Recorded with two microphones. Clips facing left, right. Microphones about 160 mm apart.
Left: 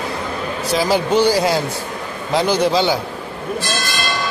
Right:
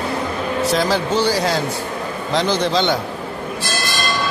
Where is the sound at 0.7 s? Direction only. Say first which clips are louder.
Left 5 dB; 15° left (ahead or behind).